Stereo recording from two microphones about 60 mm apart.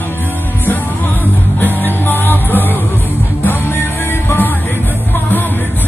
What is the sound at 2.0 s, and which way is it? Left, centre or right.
Music, left.